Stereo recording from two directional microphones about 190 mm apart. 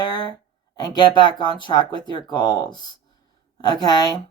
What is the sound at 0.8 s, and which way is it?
Speech, 20° left (ahead or behind).